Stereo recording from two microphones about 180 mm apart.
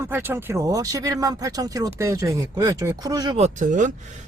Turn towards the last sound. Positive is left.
turn(degrees=-45)  # may be behind; listen again after turning